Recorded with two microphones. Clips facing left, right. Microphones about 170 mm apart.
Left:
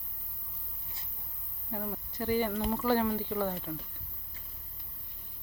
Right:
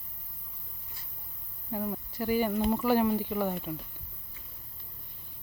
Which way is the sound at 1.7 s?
10° right (ahead or behind).